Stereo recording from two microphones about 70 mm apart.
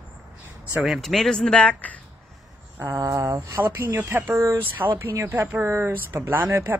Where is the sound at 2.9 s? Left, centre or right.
Right.